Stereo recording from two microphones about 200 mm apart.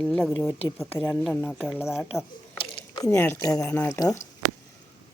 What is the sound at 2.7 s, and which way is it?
Speech, 20° left (ahead or behind).